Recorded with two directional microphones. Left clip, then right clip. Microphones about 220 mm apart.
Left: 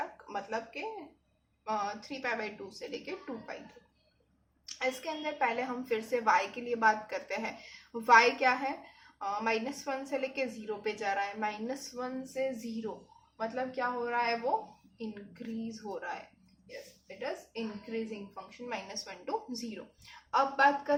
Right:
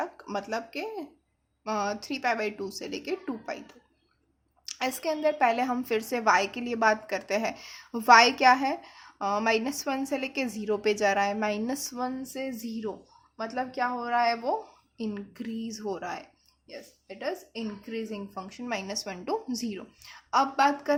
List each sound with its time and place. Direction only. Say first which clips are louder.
0.0 s a woman's voice: right 5 dB; 45° right (ahead or behind)
4.6 s a woman's voice: right 4 dB; 45° right (ahead or behind)